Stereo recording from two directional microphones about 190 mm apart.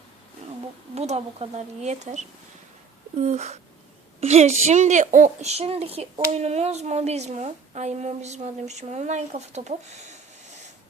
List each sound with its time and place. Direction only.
0.9 s speech: 35° right (ahead or behind)